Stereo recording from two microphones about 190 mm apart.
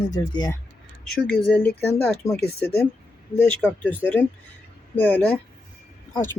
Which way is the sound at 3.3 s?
10° left (ahead or behind).